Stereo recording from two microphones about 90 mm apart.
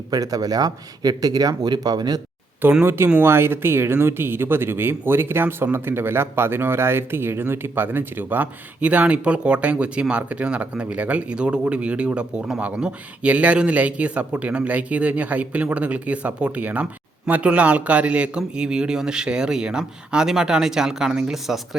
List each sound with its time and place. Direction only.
0.1 s speech: 45° right (ahead or behind)
2.8 s speech: 25° right (ahead or behind); by 21.8 s 5° right (ahead or behind)